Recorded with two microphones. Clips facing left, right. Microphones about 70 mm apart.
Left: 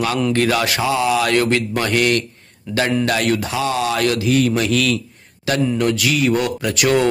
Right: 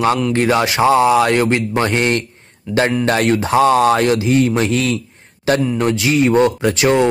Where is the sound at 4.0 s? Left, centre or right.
Right.